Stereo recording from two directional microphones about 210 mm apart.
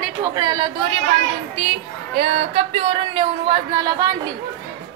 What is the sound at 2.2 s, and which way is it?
A woman's voice, 30° right (ahead or behind).